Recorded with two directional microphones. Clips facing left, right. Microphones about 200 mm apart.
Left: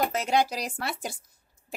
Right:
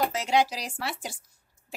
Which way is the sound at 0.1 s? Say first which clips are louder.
Even; 50° left (ahead or behind).